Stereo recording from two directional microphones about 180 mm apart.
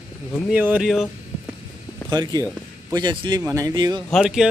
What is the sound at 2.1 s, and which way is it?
A man's voice, 20° right (ahead or behind).